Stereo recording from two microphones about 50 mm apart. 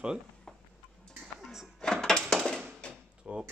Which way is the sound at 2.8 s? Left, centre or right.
Left.